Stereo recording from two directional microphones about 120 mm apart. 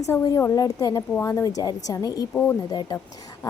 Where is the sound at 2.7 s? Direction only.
35° left (ahead or behind).